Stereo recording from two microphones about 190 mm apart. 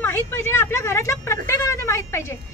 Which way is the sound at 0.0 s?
15° left (ahead or behind).